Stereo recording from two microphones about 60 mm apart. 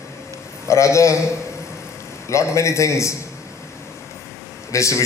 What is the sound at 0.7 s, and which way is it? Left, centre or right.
Speech, left.